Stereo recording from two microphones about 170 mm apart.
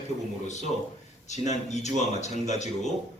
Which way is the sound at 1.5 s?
40° left (ahead or behind).